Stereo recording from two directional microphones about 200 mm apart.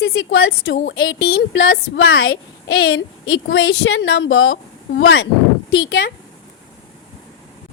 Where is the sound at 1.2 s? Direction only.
50° left (ahead or behind); by 4.6 s 75° left (ahead or behind).